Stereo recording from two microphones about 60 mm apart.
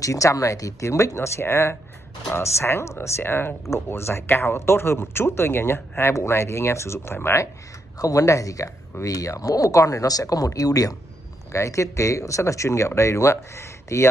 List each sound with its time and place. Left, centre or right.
0.0 s speech: left
8.0 s speech: left
11.5 s speech: left